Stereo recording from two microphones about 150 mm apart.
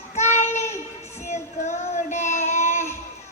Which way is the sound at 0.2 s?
50° left (ahead or behind).